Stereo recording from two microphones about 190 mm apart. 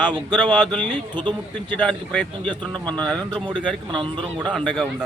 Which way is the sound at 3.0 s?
5° left (ahead or behind).